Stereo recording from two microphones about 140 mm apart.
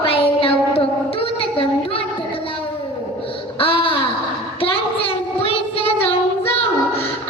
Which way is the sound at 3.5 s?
40° left (ahead or behind).